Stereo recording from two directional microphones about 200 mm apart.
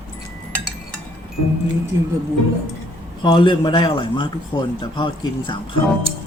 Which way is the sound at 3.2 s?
25° left (ahead or behind).